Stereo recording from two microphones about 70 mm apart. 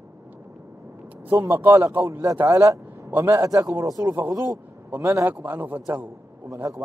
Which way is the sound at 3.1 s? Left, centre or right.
Right.